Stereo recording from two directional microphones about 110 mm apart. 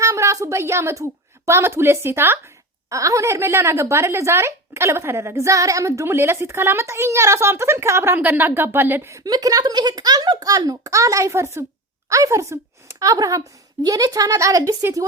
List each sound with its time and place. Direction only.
0.0 s a woman's voice: 25° right (ahead or behind)